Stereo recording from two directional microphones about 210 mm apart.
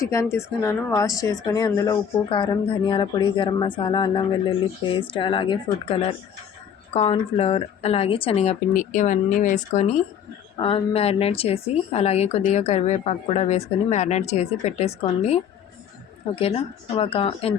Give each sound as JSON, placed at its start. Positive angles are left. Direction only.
{"t": 0.0, "sound": "speech", "side_deg": 15}
{"t": 16.3, "sound": "speech", "side_deg": 25}